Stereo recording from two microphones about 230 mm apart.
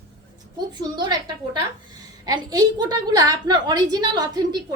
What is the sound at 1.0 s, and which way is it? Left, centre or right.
A woman's voice, centre.